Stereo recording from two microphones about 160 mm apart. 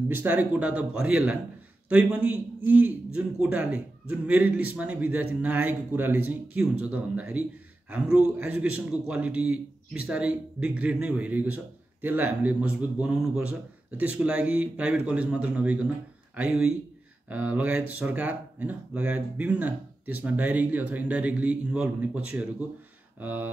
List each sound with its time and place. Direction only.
0.1 s a man's voice: 10° right (ahead or behind)